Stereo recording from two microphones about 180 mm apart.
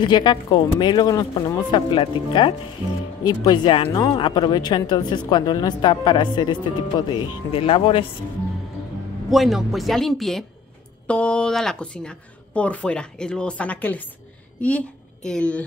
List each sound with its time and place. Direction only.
0.0 s speech: 25° left (ahead or behind)
9.3 s speech: centre (ahead or behind)